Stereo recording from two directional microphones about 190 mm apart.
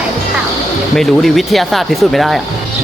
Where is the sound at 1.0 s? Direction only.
Centre (ahead or behind).